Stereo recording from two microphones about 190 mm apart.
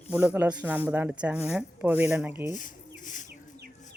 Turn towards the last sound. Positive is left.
turn(degrees=40)  # may be behind; listen again after turning